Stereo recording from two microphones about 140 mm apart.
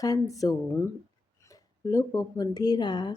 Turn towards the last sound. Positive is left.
turn(degrees=30)  # may be behind; listen again after turning